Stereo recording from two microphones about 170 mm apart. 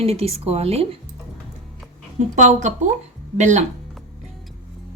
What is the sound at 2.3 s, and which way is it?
Speech, 45° right (ahead or behind).